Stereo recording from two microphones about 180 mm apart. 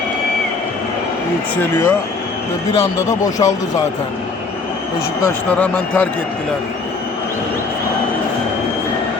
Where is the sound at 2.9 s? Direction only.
20° left (ahead or behind).